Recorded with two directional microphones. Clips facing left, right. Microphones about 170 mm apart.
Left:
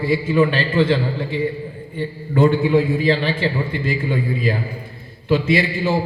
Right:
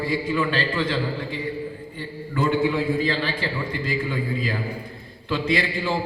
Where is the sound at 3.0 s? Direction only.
20° left (ahead or behind).